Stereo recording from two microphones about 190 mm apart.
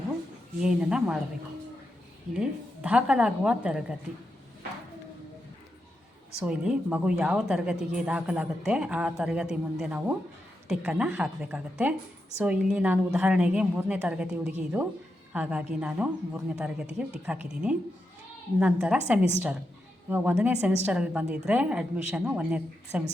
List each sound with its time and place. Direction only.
0.6 s speech: 5° right (ahead or behind)
2.3 s speech: 5° right (ahead or behind)
6.4 s a woman's voice: 5° right (ahead or behind)